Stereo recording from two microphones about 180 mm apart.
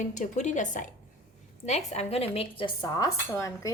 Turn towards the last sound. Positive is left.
turn(degrees=20)  # may be behind; listen again after turning